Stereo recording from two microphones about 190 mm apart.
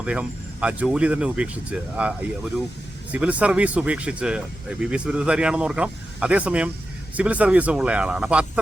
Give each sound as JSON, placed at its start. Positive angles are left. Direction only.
{"t": 0.0, "sound": "speech", "side_deg": -5}